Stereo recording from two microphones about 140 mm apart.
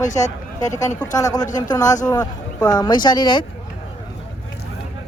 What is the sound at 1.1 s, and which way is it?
Speech, 25° left (ahead or behind).